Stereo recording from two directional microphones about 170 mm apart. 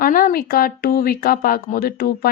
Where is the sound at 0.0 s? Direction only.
55° left (ahead or behind).